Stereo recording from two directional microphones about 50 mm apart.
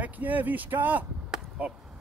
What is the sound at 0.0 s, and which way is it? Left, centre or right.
Speech, right.